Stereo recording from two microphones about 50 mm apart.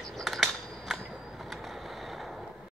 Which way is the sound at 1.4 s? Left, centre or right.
Centre.